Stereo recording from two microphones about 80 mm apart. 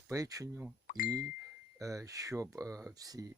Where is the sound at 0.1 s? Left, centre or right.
Right.